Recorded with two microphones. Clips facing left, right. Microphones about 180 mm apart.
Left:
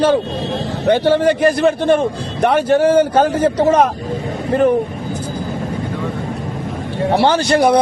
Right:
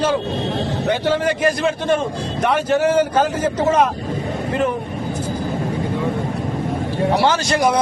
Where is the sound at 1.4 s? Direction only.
55° left (ahead or behind).